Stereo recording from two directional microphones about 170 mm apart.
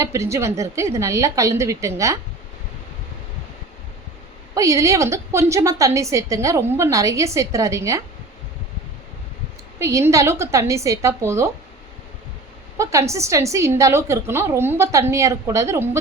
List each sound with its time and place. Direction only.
0.0 s a woman's voice: 15° right (ahead or behind)
4.5 s a woman's voice: 20° right (ahead or behind)
9.7 s a woman's voice: 15° right (ahead or behind)
12.7 s a woman's voice: 20° right (ahead or behind)